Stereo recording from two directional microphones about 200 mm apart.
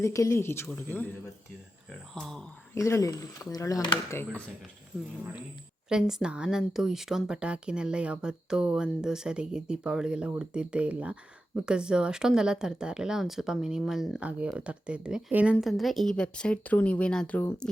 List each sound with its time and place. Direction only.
0.0 s speech: 15° left (ahead or behind)
2.1 s speech: 5° left (ahead or behind)
2.7 s speech: 15° left (ahead or behind)
5.9 s speech: 5° right (ahead or behind)